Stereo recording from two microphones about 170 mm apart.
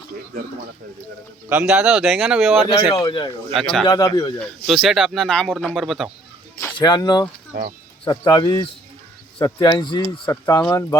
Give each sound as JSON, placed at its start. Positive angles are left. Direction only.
{"t": 1.5, "sound": "speech", "side_deg": -5}
{"t": 2.6, "sound": "speech", "side_deg": 25}
{"t": 3.5, "sound": "speech", "side_deg": 5}
{"t": 3.8, "sound": "speech", "side_deg": 25}
{"t": 4.4, "sound": "speech", "side_deg": 0}
{"t": 6.7, "sound": "speech", "side_deg": 25}